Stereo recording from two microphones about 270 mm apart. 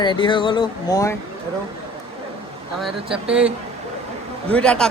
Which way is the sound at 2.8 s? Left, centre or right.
Centre.